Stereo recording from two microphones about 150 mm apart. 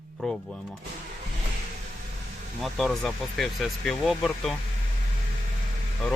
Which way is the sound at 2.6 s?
Centre (ahead or behind).